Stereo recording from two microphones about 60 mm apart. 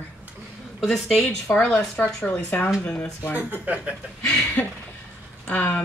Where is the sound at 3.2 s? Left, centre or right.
Left.